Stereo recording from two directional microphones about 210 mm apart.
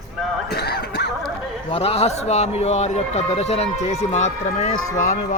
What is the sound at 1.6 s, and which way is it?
Speech, 30° left (ahead or behind).